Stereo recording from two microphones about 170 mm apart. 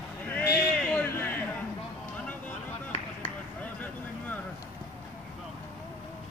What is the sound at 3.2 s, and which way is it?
Chop, 10° left (ahead or behind).